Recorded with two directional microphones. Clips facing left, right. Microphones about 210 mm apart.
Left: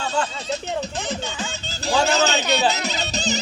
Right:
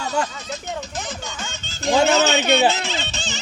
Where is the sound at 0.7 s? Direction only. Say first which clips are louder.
Left 3 dB; 35° left (ahead or behind).